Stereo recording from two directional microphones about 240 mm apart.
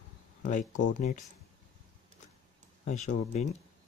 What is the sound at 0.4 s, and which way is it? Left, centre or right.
Speech, left.